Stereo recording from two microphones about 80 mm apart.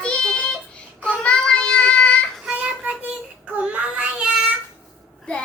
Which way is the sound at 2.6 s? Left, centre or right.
Centre.